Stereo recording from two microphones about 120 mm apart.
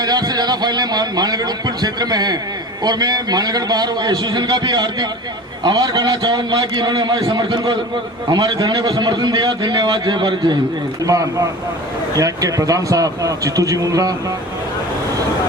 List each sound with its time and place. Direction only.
0.0 s a sound: 35° right (ahead or behind)
2.8 s a man's voice: 35° right (ahead or behind)
11.0 s a man's voice: 30° right (ahead or behind)